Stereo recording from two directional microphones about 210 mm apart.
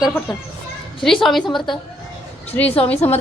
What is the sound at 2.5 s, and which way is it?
Speech, 10° left (ahead or behind).